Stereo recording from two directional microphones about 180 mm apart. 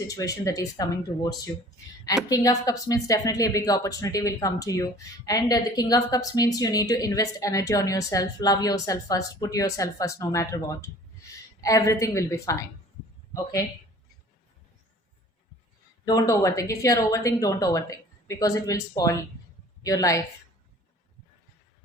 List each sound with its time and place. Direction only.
0.1 s a woman's voice: 20° left (ahead or behind)
16.0 s speech: 20° left (ahead or behind)